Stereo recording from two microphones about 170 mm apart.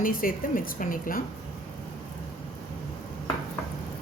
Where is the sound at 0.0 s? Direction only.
55° left (ahead or behind).